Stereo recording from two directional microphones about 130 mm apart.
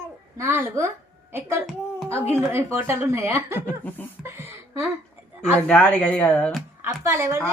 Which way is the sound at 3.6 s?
15° left (ahead or behind).